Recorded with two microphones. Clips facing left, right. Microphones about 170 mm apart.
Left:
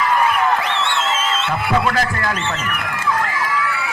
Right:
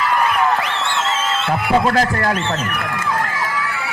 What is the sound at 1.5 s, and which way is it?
A man's voice, 35° right (ahead or behind).